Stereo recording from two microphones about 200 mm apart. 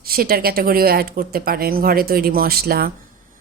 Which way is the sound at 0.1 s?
50° right (ahead or behind).